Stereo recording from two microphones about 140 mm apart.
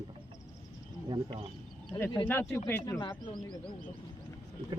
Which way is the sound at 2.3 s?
15° left (ahead or behind).